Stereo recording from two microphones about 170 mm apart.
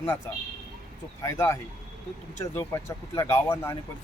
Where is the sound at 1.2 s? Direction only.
15° left (ahead or behind).